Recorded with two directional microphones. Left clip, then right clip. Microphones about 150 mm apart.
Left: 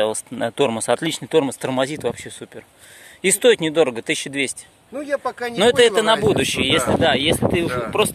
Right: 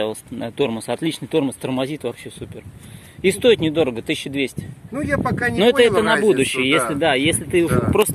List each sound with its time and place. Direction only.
0.0 s speech: 40° left (ahead or behind)
3.2 s speech: 35° left (ahead or behind)
4.9 s speech: 15° left (ahead or behind)
5.6 s speech: 25° left (ahead or behind); by 7.8 s 10° left (ahead or behind)